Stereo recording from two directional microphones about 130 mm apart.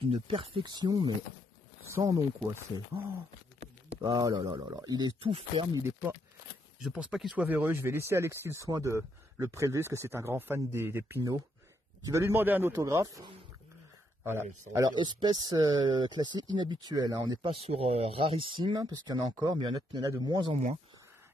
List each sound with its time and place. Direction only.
0.1 s speech: 45° right (ahead or behind); by 2.6 s 30° right (ahead or behind)
4.0 s speech: 30° right (ahead or behind)
6.8 s speech: 5° right (ahead or behind)
14.9 s speech: 35° right (ahead or behind)
17.3 s speech: 40° right (ahead or behind)